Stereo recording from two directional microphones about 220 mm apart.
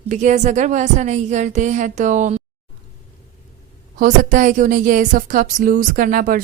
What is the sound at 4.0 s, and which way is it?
Speech, 35° right (ahead or behind).